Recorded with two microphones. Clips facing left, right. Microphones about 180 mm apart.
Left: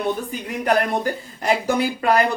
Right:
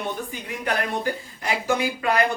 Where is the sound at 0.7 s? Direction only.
40° left (ahead or behind).